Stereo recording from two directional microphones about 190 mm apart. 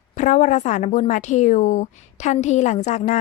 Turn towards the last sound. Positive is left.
turn(degrees=40)  # may be behind; listen again after turning